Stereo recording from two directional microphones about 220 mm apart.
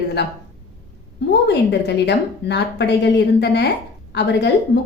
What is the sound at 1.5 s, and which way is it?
A woman's voice, 50° left (ahead or behind).